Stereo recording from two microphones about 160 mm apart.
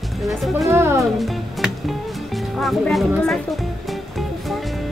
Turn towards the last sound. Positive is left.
turn(degrees=0)  # may be behind; listen again after turning